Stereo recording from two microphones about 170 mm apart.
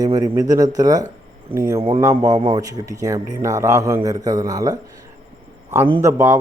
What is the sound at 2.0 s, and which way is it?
A man's voice, 15° right (ahead or behind).